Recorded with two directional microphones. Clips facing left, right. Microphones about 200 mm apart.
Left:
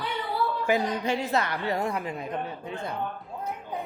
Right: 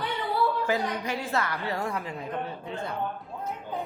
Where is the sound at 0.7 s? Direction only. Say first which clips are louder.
Left 3 dB; 15° left (ahead or behind).